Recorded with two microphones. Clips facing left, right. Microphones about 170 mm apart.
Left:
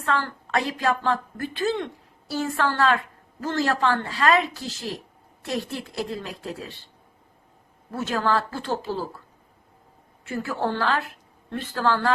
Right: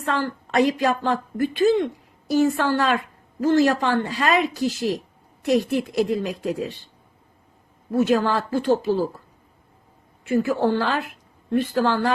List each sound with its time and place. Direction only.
0.0 s a woman's voice: 15° right (ahead or behind)
7.9 s a woman's voice: 15° right (ahead or behind)
10.2 s a woman's voice: 15° right (ahead or behind)